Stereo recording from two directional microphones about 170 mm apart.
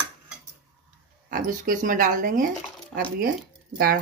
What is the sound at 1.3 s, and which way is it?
Speech, 55° right (ahead or behind).